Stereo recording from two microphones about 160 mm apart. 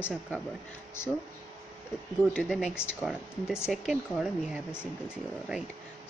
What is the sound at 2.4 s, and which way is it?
Speech, 5° right (ahead or behind).